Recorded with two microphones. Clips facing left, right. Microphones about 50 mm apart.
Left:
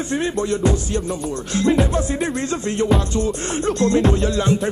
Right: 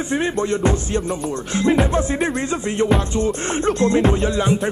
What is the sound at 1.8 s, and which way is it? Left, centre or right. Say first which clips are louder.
Music: right 2 dB; right.